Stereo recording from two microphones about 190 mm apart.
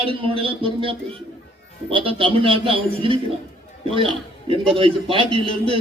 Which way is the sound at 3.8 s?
30° right (ahead or behind).